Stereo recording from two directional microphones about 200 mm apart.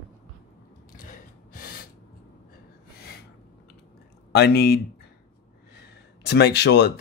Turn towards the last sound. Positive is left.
turn(degrees=55)  # may be behind; listen again after turning